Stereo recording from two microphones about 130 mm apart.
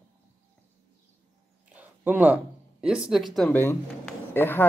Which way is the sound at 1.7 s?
15° right (ahead or behind).